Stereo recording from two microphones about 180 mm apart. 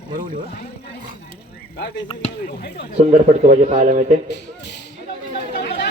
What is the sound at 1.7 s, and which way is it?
Speech, 70° left (ahead or behind).